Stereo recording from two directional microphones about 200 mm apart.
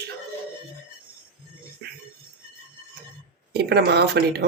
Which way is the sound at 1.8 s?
55° right (ahead or behind).